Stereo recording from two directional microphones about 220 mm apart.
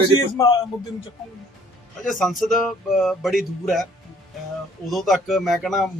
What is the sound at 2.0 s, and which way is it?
Speech, centre (ahead or behind).